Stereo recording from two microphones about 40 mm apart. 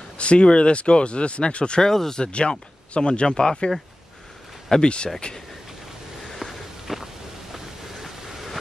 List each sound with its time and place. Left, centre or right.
0.2 s speech: left
1.9 s speech: centre
2.2 s speech: left
4.8 s speech: left
6.3 s a sound: centre
7.5 s vehicle: centre